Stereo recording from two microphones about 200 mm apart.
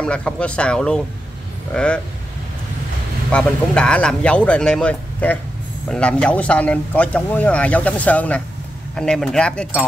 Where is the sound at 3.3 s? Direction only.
5° left (ahead or behind).